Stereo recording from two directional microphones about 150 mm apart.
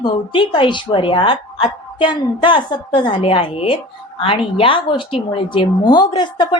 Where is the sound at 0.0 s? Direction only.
35° left (ahead or behind).